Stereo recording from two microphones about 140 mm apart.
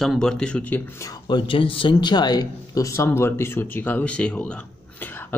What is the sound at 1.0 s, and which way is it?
Speech, 35° left (ahead or behind).